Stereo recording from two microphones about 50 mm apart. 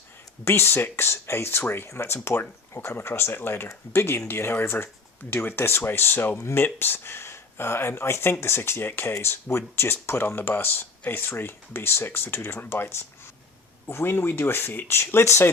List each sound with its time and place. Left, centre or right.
0.4 s speech: left
1.9 s speech: left